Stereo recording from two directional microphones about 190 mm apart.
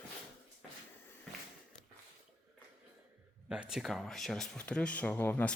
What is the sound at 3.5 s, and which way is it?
Speech, 5° right (ahead or behind).